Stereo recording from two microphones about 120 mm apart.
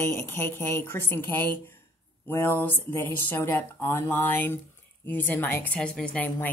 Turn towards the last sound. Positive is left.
turn(degrees=10)  # may be behind; listen again after turning